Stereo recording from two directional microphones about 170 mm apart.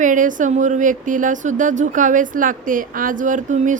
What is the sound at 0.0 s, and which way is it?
Speech, 50° right (ahead or behind).